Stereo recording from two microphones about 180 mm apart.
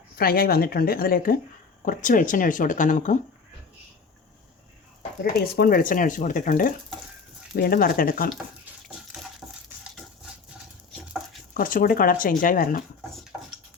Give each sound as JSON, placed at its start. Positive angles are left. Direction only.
{"t": 0.2, "sound": "a woman's voice", "side_deg": 55}
{"t": 5.2, "sound": "speech", "side_deg": 60}
{"t": 9.4, "sound": "stir", "side_deg": -5}
{"t": 11.5, "sound": "speech", "side_deg": 50}
{"t": 13.3, "sound": "a sound", "side_deg": -10}